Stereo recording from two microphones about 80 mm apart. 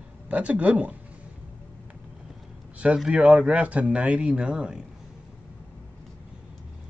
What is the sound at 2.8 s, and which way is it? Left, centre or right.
A man's voice, centre.